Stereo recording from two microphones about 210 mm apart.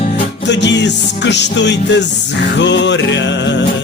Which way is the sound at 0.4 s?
55° left (ahead or behind).